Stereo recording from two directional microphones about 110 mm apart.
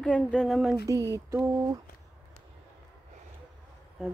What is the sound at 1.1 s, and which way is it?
Mantra, 30° right (ahead or behind).